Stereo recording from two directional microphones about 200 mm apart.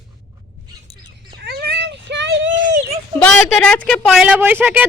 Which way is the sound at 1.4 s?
55° right (ahead or behind).